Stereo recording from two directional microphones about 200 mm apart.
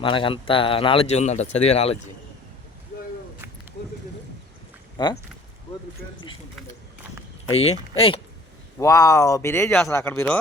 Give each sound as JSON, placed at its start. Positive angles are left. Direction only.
{"t": 0.0, "sound": "speech", "side_deg": 25}
{"t": 5.0, "sound": "speech", "side_deg": 25}
{"t": 7.5, "sound": "speech", "side_deg": 30}
{"t": 8.8, "sound": "speech", "side_deg": 15}